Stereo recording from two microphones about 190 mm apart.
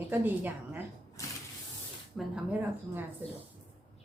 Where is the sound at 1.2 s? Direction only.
15° left (ahead or behind).